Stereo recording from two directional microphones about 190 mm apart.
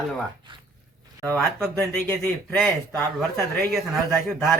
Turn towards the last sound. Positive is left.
turn(degrees=0)  # may be behind; listen again after turning